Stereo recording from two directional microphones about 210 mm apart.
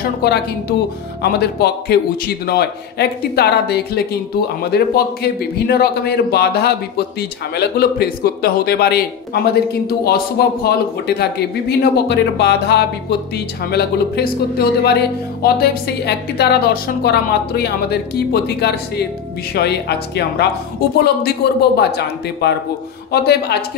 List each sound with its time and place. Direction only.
0.2 s a woman's voice: 50° left (ahead or behind)